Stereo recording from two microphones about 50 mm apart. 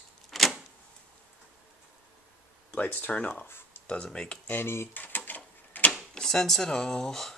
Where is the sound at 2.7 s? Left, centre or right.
Left; by 4.4 s centre.